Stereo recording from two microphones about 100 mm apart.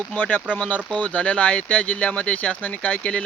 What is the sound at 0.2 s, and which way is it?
Speech, 15° left (ahead or behind).